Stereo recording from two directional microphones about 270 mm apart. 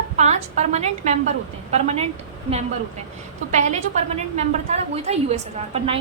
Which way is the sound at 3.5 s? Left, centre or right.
Right.